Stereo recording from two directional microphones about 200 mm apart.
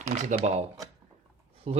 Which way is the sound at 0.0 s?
35° right (ahead or behind).